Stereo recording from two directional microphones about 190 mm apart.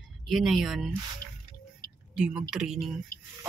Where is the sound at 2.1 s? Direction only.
5° right (ahead or behind).